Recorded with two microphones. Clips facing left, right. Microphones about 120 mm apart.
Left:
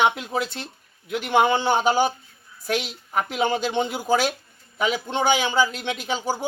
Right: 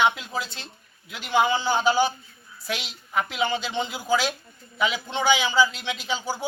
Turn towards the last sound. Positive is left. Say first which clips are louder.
# left 3 dB
turn(degrees=50)  # may be behind; listen again after turning